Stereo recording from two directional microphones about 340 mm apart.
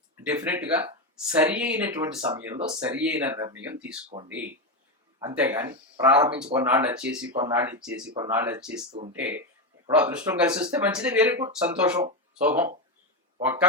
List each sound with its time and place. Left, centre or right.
0.2 s speech: centre
5.2 s speech: centre
8.9 s speech: centre
9.1 s speech: centre